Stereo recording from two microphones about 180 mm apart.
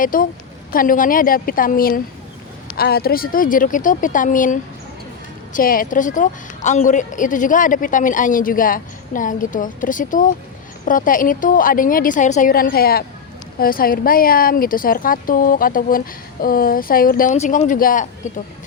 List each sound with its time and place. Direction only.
0.0 s a woman's voice: 50° left (ahead or behind)
17.3 s a woman's voice: 40° left (ahead or behind)